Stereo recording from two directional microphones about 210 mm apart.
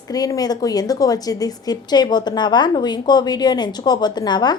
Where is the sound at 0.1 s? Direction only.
15° left (ahead or behind).